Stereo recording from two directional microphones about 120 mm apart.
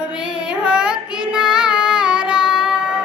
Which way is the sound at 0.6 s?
10° right (ahead or behind).